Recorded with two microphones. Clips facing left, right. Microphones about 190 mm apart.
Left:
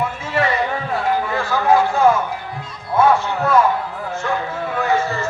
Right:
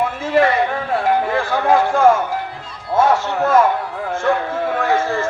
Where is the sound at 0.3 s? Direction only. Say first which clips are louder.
Right 5 dB; 55° right (ahead or behind).